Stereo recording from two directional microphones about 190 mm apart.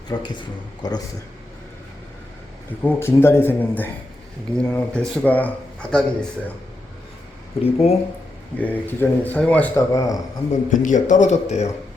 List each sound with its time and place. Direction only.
0.1 s speech: 20° left (ahead or behind)
2.8 s speech: 10° left (ahead or behind)
7.6 s a man's voice: 30° left (ahead or behind)
8.5 s speech: 10° left (ahead or behind)
10.5 s a man's voice: 40° left (ahead or behind)